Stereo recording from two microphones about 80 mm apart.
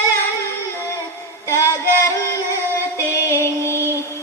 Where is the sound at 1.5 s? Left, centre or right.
Left.